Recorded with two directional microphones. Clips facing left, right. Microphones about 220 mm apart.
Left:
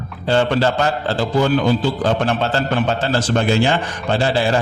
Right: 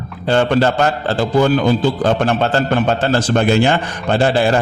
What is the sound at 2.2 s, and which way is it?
A man's voice, 55° right (ahead or behind).